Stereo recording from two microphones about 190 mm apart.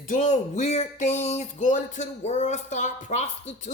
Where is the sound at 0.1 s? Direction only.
40° left (ahead or behind).